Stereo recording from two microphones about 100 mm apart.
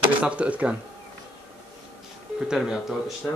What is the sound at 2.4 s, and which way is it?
Speech, 5° right (ahead or behind).